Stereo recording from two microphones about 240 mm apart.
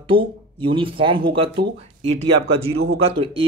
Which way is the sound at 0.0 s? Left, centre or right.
Right.